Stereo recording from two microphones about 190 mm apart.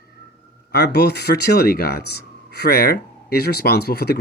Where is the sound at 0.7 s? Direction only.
60° left (ahead or behind).